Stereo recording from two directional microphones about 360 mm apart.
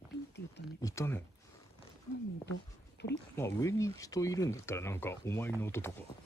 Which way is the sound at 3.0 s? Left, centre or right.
Left.